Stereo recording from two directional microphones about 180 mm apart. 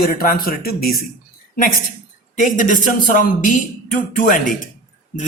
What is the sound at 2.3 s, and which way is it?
Speech, 45° left (ahead or behind).